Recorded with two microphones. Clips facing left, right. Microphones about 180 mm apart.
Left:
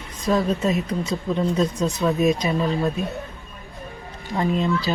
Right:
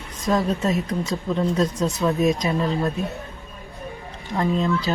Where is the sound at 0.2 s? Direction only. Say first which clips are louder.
Left 1 dB; centre (ahead or behind).